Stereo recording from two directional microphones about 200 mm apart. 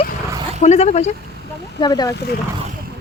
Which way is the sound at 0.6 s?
35° left (ahead or behind).